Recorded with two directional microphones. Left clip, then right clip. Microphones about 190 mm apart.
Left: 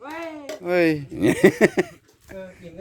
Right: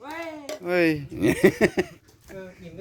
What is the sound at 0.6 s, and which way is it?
Speech, 10° left (ahead or behind).